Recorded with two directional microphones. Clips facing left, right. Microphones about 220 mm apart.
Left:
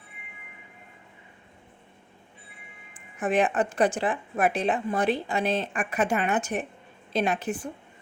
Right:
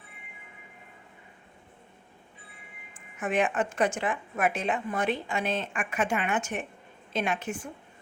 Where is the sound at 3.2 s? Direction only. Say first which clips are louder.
Left 3 dB; 35° left (ahead or behind).